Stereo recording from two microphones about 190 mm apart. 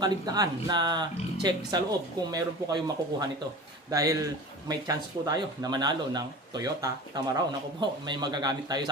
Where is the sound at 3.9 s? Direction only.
15° right (ahead or behind).